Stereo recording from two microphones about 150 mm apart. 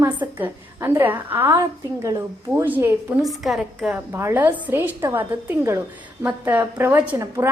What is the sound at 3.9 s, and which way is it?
A woman's voice, 15° right (ahead or behind).